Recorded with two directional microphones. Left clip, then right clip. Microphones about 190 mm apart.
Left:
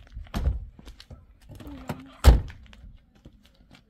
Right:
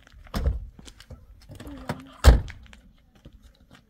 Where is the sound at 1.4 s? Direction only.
20° right (ahead or behind).